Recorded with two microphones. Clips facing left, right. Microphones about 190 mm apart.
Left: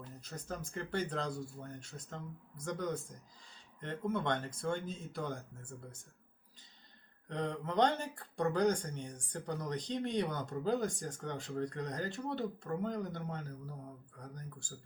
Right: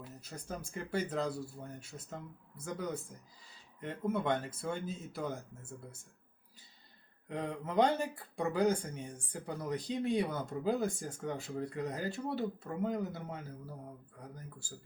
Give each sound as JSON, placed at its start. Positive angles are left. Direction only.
{"t": 0.0, "sound": "speech", "side_deg": -10}
{"t": 7.3, "sound": "speech", "side_deg": -5}